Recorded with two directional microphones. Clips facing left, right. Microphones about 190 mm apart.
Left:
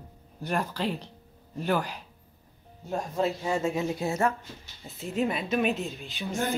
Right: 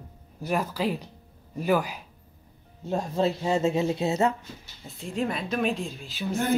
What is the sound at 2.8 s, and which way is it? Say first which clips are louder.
Speech: right 3 dB; 25° right (ahead or behind).